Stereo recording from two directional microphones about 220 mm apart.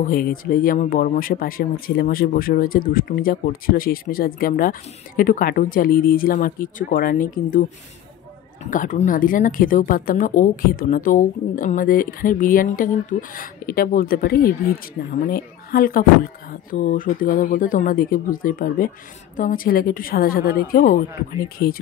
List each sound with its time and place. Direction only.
0.0 s speech: 40° left (ahead or behind)
8.6 s speech: 35° left (ahead or behind)